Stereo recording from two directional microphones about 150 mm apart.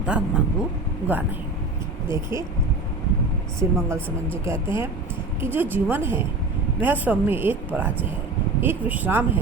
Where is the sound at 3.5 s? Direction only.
20° right (ahead or behind).